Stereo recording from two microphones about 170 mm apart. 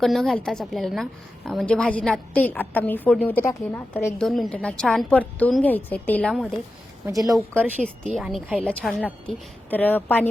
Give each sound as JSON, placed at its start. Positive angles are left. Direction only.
{"t": 0.0, "sound": "a woman's voice", "side_deg": 0}
{"t": 4.2, "sound": "a woman's voice", "side_deg": 5}
{"t": 7.0, "sound": "a woman's voice", "side_deg": -20}
{"t": 7.9, "sound": "a woman's voice", "side_deg": 0}